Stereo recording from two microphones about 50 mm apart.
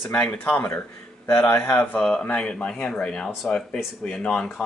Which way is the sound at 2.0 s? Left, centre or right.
Centre.